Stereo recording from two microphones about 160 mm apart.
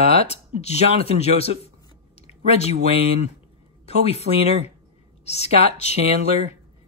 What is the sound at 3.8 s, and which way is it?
Speech, 40° left (ahead or behind).